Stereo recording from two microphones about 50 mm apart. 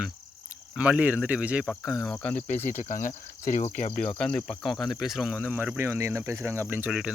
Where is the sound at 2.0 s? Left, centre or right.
Left.